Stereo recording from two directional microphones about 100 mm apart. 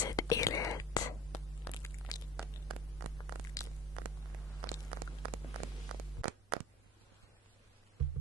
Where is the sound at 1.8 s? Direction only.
35° left (ahead or behind).